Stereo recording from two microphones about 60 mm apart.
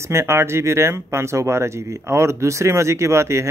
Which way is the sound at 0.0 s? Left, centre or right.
Right.